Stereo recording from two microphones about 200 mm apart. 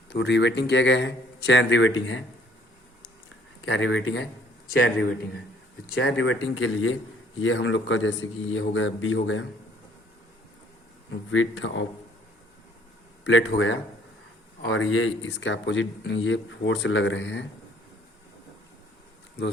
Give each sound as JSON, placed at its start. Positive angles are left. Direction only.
{"t": 0.1, "sound": "a man's voice", "side_deg": 60}
{"t": 3.7, "sound": "speech", "side_deg": 70}
{"t": 5.9, "sound": "speech", "side_deg": 70}
{"t": 11.1, "sound": "speech", "side_deg": 75}
{"t": 13.2, "sound": "speech", "side_deg": 65}
{"t": 14.6, "sound": "speech", "side_deg": 80}